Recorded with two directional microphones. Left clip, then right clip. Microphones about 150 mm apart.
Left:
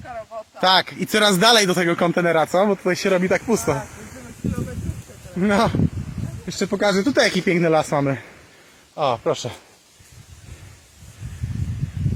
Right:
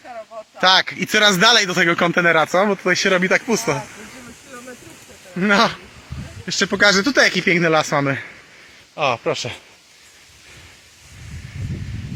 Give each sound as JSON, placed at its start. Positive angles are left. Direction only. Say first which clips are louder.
{"t": 0.0, "sound": "a sound", "louder": "left 1 dB", "side_deg": -5}
{"t": 0.6, "sound": "a man's voice", "louder": "right 2 dB", "side_deg": 15}
{"t": 5.4, "sound": "a man's voice", "louder": "right 3 dB", "side_deg": 10}